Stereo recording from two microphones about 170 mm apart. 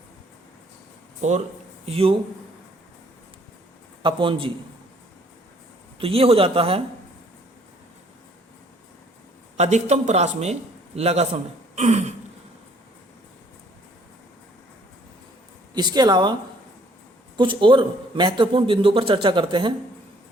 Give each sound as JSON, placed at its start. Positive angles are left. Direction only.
{"t": 1.2, "sound": "a man's voice", "side_deg": -45}
{"t": 4.0, "sound": "a man's voice", "side_deg": -30}
{"t": 6.0, "sound": "a man's voice", "side_deg": -35}
{"t": 9.6, "sound": "a man's voice", "side_deg": -40}
{"t": 11.7, "sound": "throat clearing", "side_deg": -40}
{"t": 15.7, "sound": "a man's voice", "side_deg": -25}
{"t": 17.3, "sound": "a man's voice", "side_deg": -30}